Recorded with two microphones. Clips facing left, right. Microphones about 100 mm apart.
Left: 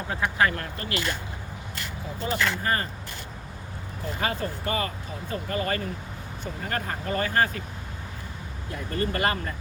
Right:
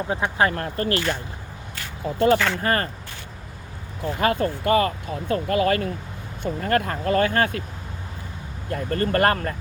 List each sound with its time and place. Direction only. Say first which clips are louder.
0.1 s speech: right 2 dB; 25° right (ahead or behind)
2.1 s speech: right 9 dB; 65° right (ahead or behind)
4.2 s speech: right 8 dB; 55° right (ahead or behind)
8.7 s speech: right 6 dB; 55° right (ahead or behind)